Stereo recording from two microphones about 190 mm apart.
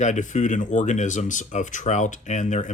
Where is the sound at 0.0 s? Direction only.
40° left (ahead or behind).